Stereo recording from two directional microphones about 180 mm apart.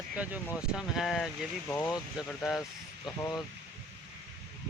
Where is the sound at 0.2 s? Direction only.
5° right (ahead or behind).